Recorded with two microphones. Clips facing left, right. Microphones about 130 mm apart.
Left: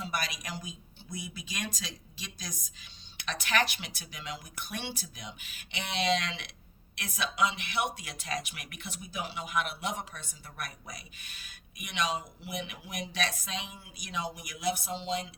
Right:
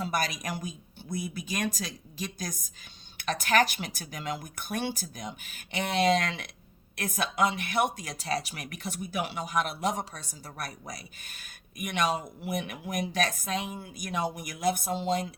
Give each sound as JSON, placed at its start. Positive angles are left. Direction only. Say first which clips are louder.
{"t": 0.0, "sound": "a man's voice", "louder": "right 5 dB", "side_deg": -45}
{"t": 9.0, "sound": "speech", "louder": "right 5 dB", "side_deg": -65}
{"t": 9.4, "sound": "a man's voice", "louder": "right 3 dB", "side_deg": -40}